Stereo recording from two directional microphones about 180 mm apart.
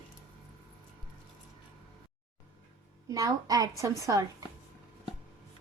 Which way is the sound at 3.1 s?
20° right (ahead or behind).